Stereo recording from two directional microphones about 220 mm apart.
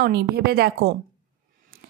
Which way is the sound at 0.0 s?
45° right (ahead or behind).